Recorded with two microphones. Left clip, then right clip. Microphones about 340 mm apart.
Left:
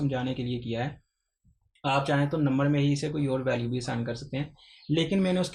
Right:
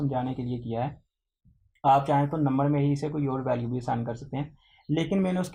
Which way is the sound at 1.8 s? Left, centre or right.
Centre.